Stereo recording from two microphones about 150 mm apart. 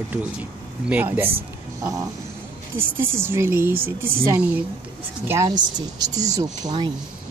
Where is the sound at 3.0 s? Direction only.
15° right (ahead or behind).